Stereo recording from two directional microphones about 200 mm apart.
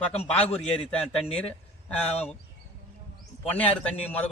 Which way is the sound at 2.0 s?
30° left (ahead or behind).